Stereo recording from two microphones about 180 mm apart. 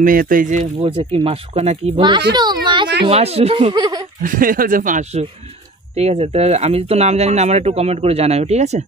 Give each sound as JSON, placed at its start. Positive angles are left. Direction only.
{"t": 0.0, "sound": "speech", "side_deg": -50}
{"t": 0.7, "sound": "speech", "side_deg": -30}
{"t": 2.3, "sound": "a sound", "side_deg": -25}
{"t": 3.1, "sound": "speech", "side_deg": -35}
{"t": 4.2, "sound": "speech", "side_deg": -50}
{"t": 5.9, "sound": "speech", "side_deg": -35}